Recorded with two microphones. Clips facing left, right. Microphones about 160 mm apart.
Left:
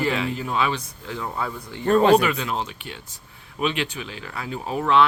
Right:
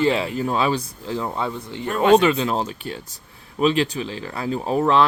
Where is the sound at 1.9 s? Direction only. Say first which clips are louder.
Even; 35° left (ahead or behind).